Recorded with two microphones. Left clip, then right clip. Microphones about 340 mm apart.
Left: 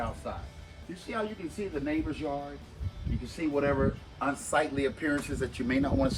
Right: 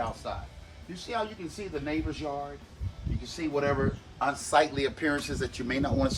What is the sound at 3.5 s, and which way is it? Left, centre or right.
A man's voice, centre.